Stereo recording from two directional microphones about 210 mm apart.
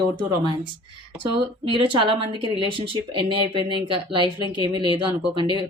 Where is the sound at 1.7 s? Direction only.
25° right (ahead or behind).